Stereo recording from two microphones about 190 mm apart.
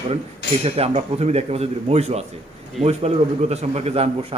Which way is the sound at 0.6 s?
30° right (ahead or behind).